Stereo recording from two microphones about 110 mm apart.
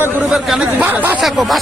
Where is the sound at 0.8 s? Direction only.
15° right (ahead or behind).